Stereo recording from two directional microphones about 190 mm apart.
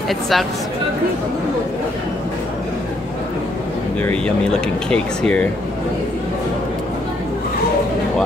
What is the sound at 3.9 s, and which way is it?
Speech, 5° left (ahead or behind).